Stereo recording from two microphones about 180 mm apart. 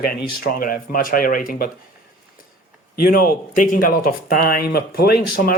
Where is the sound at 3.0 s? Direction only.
55° left (ahead or behind).